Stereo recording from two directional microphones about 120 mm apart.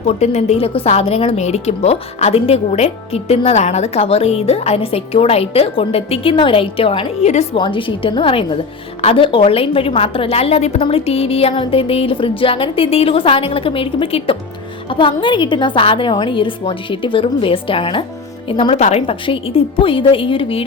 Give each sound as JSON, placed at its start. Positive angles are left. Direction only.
{"t": 0.2, "sound": "speech", "side_deg": 65}
{"t": 7.5, "sound": "speech", "side_deg": 45}
{"t": 10.8, "sound": "speech", "side_deg": 50}
{"t": 18.8, "sound": "speech", "side_deg": 60}